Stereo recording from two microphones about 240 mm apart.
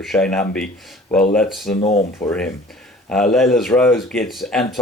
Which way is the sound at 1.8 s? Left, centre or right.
Left.